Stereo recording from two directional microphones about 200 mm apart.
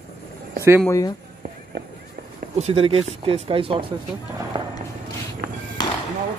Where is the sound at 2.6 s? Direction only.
30° right (ahead or behind).